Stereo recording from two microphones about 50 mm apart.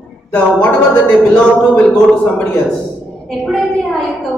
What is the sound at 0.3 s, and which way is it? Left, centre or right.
A man's voice, left.